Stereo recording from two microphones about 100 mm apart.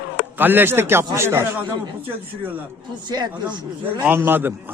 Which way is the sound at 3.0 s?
45° right (ahead or behind).